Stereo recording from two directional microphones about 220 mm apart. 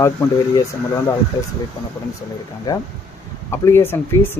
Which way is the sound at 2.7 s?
15° left (ahead or behind).